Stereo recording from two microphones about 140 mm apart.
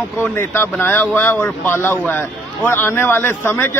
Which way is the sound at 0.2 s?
15° left (ahead or behind).